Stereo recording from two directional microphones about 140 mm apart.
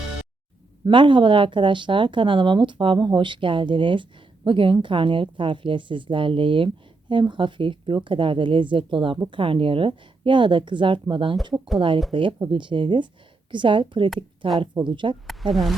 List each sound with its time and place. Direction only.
0.9 s speech: 35° right (ahead or behind)